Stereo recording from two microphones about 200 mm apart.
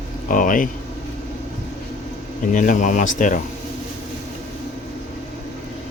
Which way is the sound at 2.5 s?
40° left (ahead or behind).